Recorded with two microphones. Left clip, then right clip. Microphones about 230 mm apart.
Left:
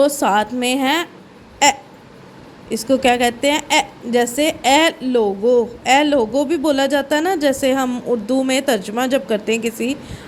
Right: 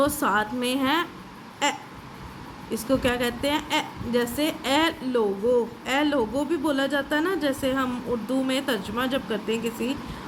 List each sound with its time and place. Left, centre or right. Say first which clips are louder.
0.0 s a woman's voice: left 8 dB; left